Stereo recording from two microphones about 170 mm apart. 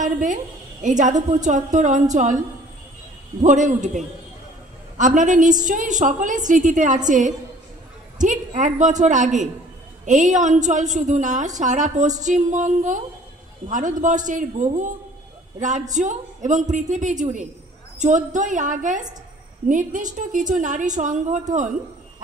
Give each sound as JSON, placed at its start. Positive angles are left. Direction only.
{"t": 0.0, "sound": "a woman's voice", "side_deg": -50}
{"t": 3.3, "sound": "a woman's voice", "side_deg": -45}
{"t": 15.9, "sound": "a woman's voice", "side_deg": -45}